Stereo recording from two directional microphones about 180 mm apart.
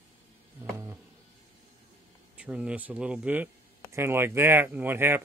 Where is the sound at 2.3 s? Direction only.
5° right (ahead or behind).